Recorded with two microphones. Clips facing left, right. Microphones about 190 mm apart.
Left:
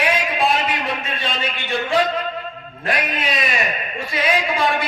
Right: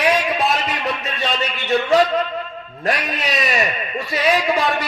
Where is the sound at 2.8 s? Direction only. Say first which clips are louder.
Right 1 dB; 40° right (ahead or behind).